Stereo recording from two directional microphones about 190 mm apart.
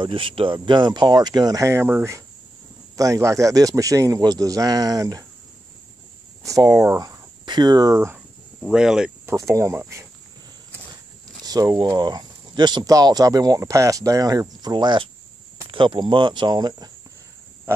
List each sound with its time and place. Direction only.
0.0 s speech: 25° right (ahead or behind)
6.4 s speech: 15° right (ahead or behind)
8.6 s speech: 5° right (ahead or behind)
9.3 s speech: 15° right (ahead or behind)
11.4 s speech: 20° right (ahead or behind)